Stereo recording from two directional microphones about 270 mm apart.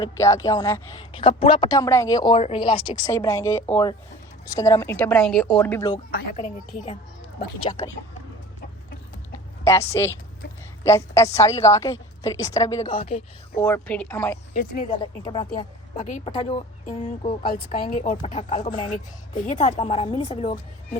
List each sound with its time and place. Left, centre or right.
0.0 s a woman's voice: centre
6.1 s a woman's voice: left
7.6 s a woman's voice: centre
9.6 s a woman's voice: centre
13.6 s a woman's voice: centre
14.5 s speech: left
14.8 s a woman's voice: centre